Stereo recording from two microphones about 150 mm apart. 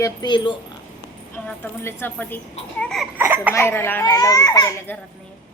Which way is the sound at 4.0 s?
25° left (ahead or behind).